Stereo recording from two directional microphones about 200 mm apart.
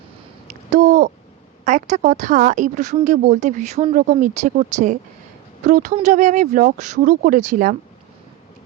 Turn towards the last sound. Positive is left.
turn(degrees=-40)  # may be behind; listen again after turning